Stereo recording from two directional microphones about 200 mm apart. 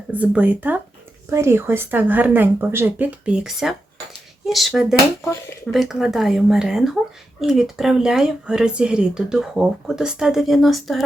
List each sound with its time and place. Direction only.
0.1 s speech: 5° right (ahead or behind)
5.2 s speech: 15° left (ahead or behind)
5.7 s speech: centre (ahead or behind)